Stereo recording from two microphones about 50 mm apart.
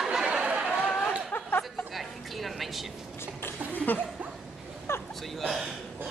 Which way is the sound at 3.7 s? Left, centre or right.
Left.